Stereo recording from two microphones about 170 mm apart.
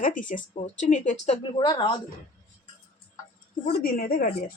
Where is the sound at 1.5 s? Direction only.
30° left (ahead or behind).